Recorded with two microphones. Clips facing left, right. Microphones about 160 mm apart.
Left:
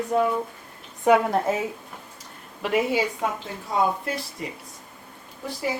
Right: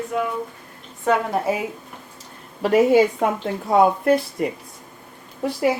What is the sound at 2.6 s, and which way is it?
A woman's voice, 45° right (ahead or behind).